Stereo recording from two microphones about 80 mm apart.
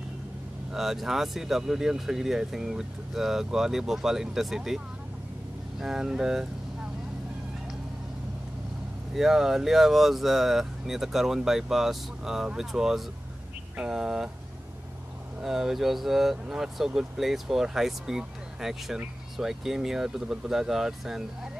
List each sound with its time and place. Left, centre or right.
0.7 s speech: centre
9.1 s speech: centre
15.4 s speech: centre